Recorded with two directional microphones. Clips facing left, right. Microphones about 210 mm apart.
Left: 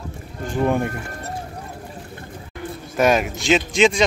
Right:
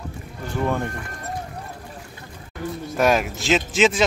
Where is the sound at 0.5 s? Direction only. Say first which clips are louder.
Left 4 dB; 15° left (ahead or behind).